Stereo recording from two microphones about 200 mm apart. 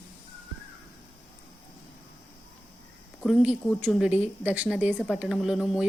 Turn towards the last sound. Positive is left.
turn(degrees=0)  # may be behind; listen again after turning